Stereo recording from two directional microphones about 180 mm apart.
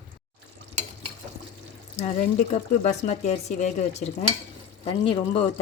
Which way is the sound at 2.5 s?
40° left (ahead or behind).